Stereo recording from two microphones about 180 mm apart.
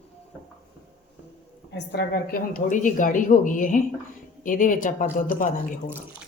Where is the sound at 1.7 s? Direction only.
65° left (ahead or behind); by 5.8 s 50° left (ahead or behind).